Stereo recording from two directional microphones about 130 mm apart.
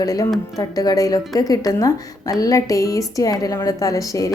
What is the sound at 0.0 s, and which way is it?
A woman's voice, 25° left (ahead or behind).